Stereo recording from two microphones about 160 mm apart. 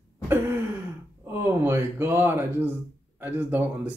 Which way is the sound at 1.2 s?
15° right (ahead or behind).